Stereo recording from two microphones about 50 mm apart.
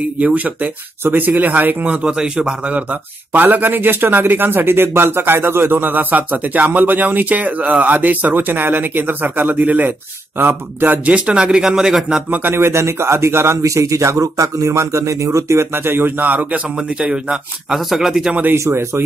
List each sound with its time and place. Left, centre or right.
0.2 s speech: right
1.0 s speech: right
2.0 s speech: centre
2.7 s speech: right
11.1 s speech: right
12.5 s speech: right
15.7 s speech: right
16.3 s speech: right
17.0 s speech: centre
17.7 s speech: centre
18.7 s speech: right